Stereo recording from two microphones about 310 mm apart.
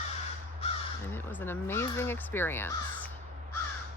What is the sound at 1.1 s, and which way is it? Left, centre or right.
Speech, centre.